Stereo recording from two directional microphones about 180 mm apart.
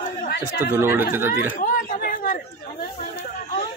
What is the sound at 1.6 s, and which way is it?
Chatter, 45° left (ahead or behind).